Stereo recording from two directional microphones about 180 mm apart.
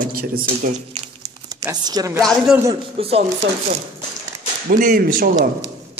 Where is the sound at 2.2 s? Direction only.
Centre (ahead or behind).